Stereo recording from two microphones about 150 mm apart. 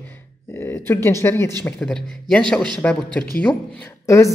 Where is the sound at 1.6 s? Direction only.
5° left (ahead or behind).